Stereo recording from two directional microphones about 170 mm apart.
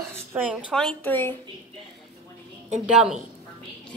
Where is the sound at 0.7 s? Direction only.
5° left (ahead or behind).